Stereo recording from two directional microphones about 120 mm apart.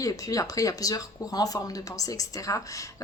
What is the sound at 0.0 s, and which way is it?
Speech, 30° left (ahead or behind).